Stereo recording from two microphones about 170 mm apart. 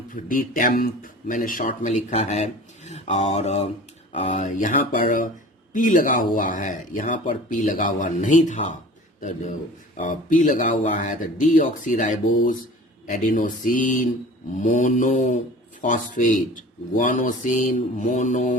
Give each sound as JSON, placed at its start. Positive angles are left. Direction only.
{"t": 0.1, "sound": "a sound", "side_deg": 55}
{"t": 1.3, "sound": "speech", "side_deg": 55}
{"t": 10.0, "sound": "speech", "side_deg": 50}